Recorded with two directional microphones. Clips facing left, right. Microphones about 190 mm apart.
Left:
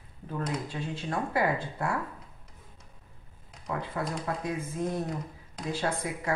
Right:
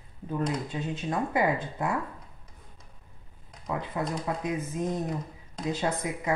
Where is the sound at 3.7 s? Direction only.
20° right (ahead or behind).